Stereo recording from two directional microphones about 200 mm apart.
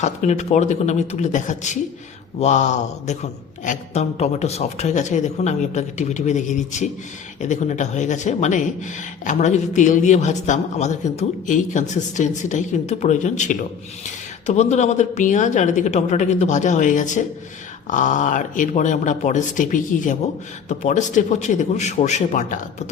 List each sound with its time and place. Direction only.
0.0 s a man's voice: 35° left (ahead or behind)